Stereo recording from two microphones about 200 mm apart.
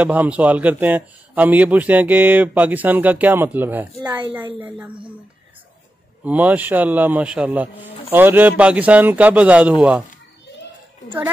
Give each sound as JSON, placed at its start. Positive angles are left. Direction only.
{"t": 0.0, "sound": "a man's voice", "side_deg": -5}
{"t": 4.0, "sound": "a woman's voice", "side_deg": -20}
{"t": 4.6, "sound": "a man's voice", "side_deg": -10}
{"t": 6.2, "sound": "a man's voice", "side_deg": -10}